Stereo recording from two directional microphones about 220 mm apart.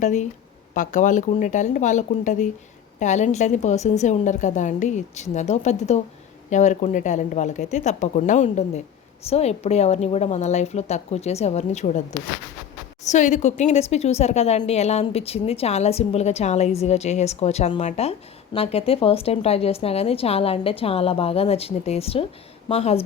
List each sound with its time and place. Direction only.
0.0 s a woman's voice: 35° left (ahead or behind)
13.1 s speech: 35° left (ahead or behind)